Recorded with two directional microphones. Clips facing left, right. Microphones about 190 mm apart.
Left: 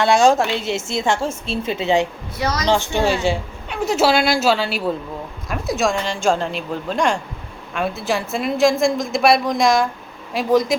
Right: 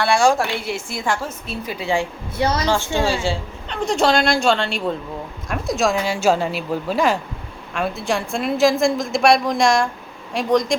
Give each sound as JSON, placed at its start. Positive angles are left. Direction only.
{"t": 0.0, "sound": "a woman's voice", "side_deg": 20}
{"t": 2.4, "sound": "a woman's voice", "side_deg": -30}
{"t": 2.6, "sound": "a woman's voice", "side_deg": 20}